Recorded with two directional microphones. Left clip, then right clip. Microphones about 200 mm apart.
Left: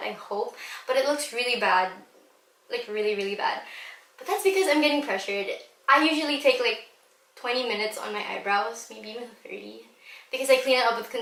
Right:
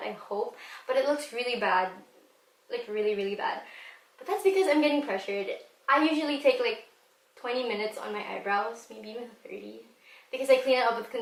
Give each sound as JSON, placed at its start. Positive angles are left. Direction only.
{"t": 0.0, "sound": "speech", "side_deg": -10}
{"t": 0.3, "sound": "speech", "side_deg": -25}
{"t": 0.5, "sound": "a woman's voice", "side_deg": -5}